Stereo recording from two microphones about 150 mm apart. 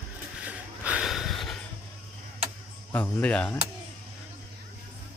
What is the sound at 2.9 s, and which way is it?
Speech, 10° left (ahead or behind).